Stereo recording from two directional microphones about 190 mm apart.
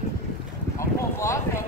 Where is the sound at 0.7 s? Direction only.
15° left (ahead or behind).